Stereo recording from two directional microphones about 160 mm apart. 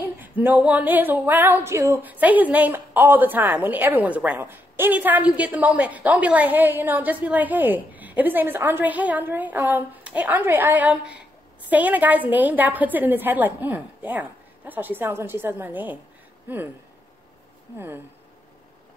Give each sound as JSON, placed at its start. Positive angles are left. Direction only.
{"t": 0.0, "sound": "speech", "side_deg": -10}
{"t": 17.7, "sound": "speech", "side_deg": -15}